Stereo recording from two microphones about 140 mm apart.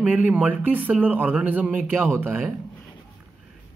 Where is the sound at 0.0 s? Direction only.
10° right (ahead or behind).